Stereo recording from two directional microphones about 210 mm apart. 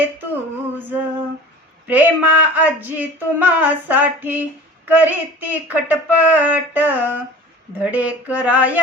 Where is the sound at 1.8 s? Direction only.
10° right (ahead or behind).